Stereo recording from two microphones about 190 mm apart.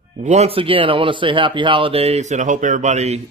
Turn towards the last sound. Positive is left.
turn(degrees=-35)  # may be behind; listen again after turning